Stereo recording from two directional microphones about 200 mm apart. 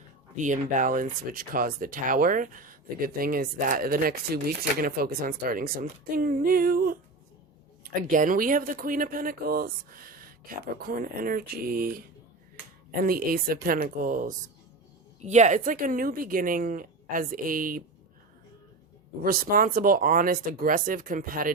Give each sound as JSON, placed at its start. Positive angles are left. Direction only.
{"t": 0.3, "sound": "speech", "side_deg": -40}
{"t": 8.0, "sound": "speech", "side_deg": -40}
{"t": 19.2, "sound": "speech", "side_deg": -45}